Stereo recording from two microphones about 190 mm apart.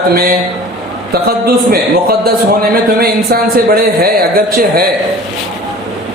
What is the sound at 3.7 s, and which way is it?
A man's voice, 50° right (ahead or behind).